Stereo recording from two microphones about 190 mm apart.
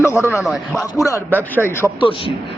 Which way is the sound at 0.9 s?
15° left (ahead or behind).